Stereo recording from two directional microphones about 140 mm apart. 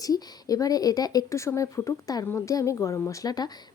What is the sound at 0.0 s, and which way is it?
Speech, 25° left (ahead or behind).